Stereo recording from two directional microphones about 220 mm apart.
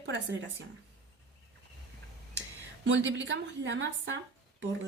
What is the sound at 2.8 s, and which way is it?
Speech, 55° right (ahead or behind).